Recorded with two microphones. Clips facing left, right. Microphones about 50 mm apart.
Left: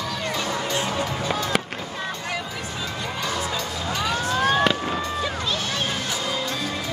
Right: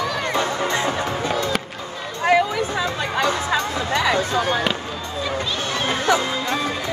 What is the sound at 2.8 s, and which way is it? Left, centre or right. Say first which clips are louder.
Music: right 7 dB; right.